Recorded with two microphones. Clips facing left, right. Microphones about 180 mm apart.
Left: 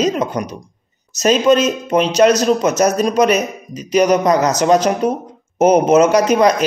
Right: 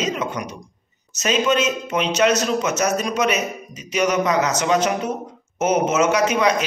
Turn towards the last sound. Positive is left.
turn(degrees=40)  # may be behind; listen again after turning